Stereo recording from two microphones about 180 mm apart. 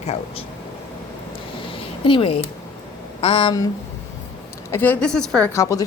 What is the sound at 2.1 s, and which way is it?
A woman's voice, 30° left (ahead or behind).